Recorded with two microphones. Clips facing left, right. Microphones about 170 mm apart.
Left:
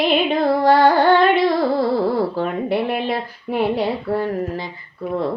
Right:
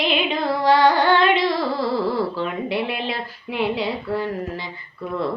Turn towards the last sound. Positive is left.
turn(degrees=60)  # may be behind; listen again after turning